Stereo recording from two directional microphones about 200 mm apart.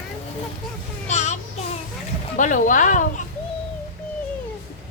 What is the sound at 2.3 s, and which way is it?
Speech, 40° left (ahead or behind).